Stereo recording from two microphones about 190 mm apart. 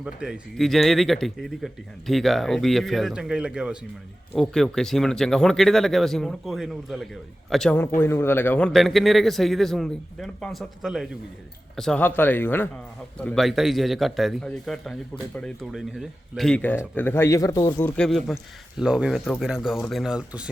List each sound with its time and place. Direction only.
0.0 s speech: 5° right (ahead or behind)